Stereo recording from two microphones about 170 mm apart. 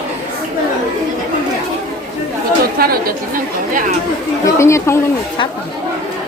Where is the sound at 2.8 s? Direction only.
60° right (ahead or behind).